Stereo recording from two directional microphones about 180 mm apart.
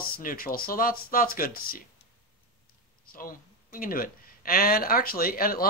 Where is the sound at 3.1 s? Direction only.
50° left (ahead or behind).